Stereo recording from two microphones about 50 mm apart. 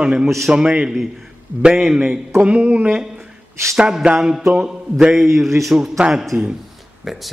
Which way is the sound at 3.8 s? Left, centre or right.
Centre.